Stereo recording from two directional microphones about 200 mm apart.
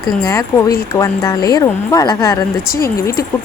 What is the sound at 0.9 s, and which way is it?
A woman's voice, 15° left (ahead or behind).